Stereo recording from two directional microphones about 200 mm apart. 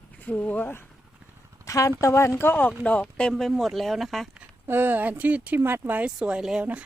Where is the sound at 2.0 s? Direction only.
15° left (ahead or behind).